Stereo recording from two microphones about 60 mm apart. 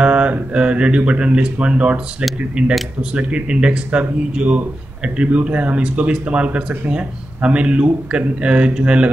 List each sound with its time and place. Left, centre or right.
0.0 s speech: right